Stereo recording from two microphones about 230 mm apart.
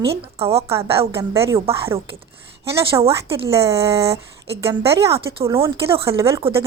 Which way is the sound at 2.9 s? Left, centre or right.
Centre.